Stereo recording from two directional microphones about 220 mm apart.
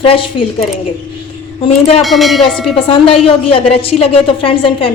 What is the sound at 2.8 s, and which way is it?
A woman's voice, 25° left (ahead or behind).